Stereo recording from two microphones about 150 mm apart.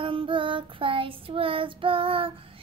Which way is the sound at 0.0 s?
35° right (ahead or behind).